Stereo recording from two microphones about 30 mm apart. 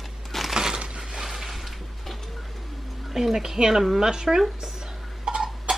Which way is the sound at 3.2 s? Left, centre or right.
Centre.